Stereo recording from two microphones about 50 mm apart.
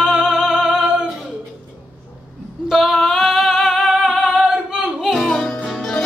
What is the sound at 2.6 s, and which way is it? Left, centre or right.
Female singing, centre.